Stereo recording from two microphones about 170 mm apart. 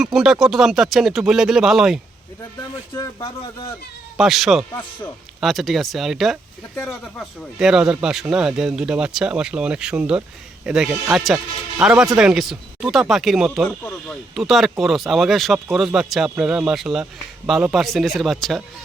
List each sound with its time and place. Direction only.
0.0 s speech: centre (ahead or behind)
3.2 s speech: 30° left (ahead or behind)
4.2 s speech: centre (ahead or behind)